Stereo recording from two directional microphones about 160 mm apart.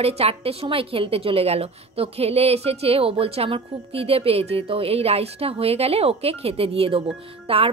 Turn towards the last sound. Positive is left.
turn(degrees=-35)  # may be behind; listen again after turning